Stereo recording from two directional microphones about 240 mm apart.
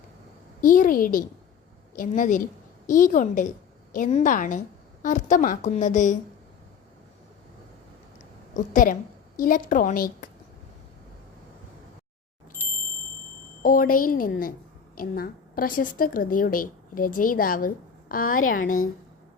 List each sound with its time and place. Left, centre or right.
0.6 s a woman's voice: left
8.5 s a woman's voice: left
13.6 s a woman's voice: left